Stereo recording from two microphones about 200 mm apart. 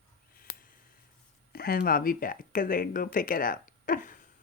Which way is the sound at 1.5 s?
50° left (ahead or behind).